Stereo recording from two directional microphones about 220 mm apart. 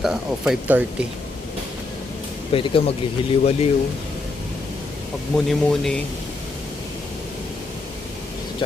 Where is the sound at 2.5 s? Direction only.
25° left (ahead or behind).